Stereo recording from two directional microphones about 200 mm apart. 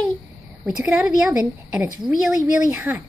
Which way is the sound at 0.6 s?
5° right (ahead or behind).